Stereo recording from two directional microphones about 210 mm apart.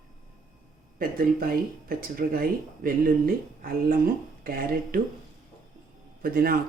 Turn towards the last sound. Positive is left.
turn(degrees=-45)  # may be behind; listen again after turning